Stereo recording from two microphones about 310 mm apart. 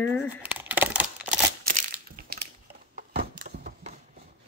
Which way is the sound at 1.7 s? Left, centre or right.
Right.